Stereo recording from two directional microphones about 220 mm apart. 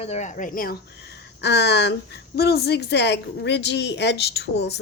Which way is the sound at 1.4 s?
50° left (ahead or behind).